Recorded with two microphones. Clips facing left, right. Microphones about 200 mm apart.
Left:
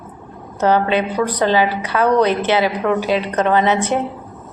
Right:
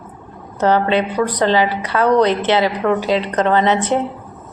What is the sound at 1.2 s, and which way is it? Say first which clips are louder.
A woman's voice: left 1 dB; 10° left (ahead or behind).